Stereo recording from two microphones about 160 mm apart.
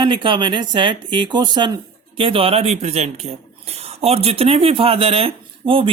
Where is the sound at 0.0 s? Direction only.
30° right (ahead or behind).